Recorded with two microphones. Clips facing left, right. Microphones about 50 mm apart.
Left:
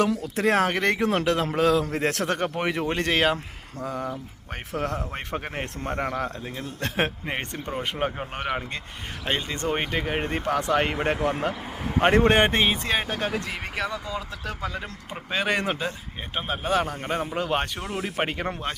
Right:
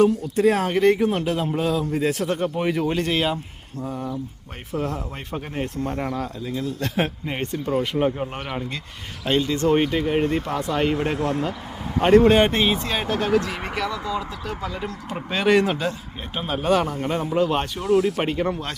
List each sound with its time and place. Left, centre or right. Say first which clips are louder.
0.0 s a man's voice: right 5 dB; left
1.1 s a man's voice: even; left
3.8 s a man's voice: even; left
4.8 s a man's voice: right 1 dB; left
5.9 s a man's voice: even; left
7.8 s speech: right 5 dB; left
9.6 s speech: right 5 dB; centre
10.4 s a man's voice: even; left
10.9 s speech: right 2 dB; left
12.3 s a man's voice: right 2 dB; left
14.4 s a man's voice: right 2 dB; left
15.3 s speech: right 6 dB; centre
16.8 s speech: right 3 dB; left